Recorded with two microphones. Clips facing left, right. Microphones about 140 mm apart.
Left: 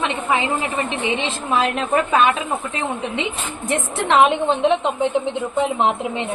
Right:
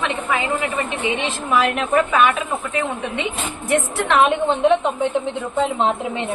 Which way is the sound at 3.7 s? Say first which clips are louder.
Even; 20° left (ahead or behind).